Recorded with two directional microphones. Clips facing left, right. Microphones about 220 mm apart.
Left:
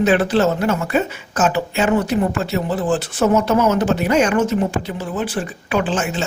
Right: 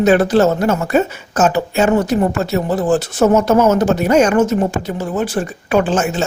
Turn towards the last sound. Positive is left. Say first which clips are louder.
# right 5 dB
turn(degrees=-45)  # may be behind; listen again after turning